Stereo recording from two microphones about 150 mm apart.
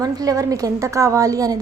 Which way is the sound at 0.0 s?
25° right (ahead or behind).